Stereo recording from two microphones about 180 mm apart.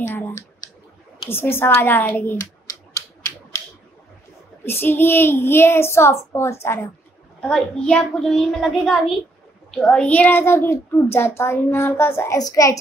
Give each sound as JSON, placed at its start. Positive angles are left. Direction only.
{"t": 0.0, "sound": "a sound", "side_deg": 15}
{"t": 1.3, "sound": "a woman's voice", "side_deg": 15}
{"t": 2.9, "sound": "typewriter", "side_deg": 15}
{"t": 4.6, "sound": "a woman's voice", "side_deg": 10}
{"t": 7.3, "sound": "a child's voice", "side_deg": 5}